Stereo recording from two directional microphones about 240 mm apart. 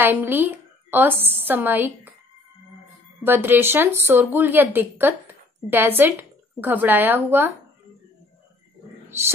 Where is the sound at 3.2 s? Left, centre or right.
Centre.